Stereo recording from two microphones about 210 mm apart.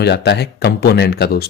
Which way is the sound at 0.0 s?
50° left (ahead or behind).